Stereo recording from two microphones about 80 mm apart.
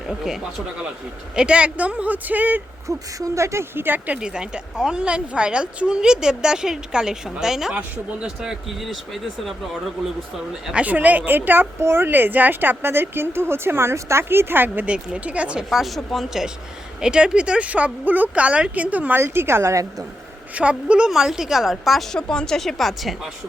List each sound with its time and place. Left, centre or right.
1.4 s speech: centre
2.8 s a woman's voice: right; by 10.1 s centre
10.7 s speech: centre
14.8 s speech: centre; by 20.1 s right
20.6 s a woman's voice: centre